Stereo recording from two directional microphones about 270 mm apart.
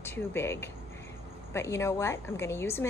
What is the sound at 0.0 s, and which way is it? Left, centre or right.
A woman's voice, centre.